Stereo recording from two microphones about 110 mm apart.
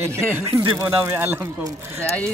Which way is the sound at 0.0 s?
25° right (ahead or behind).